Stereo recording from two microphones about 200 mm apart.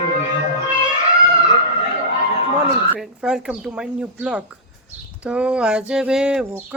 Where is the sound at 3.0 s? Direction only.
5° right (ahead or behind).